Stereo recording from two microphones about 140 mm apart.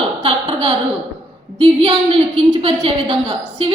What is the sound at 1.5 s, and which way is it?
A woman's voice, 35° right (ahead or behind).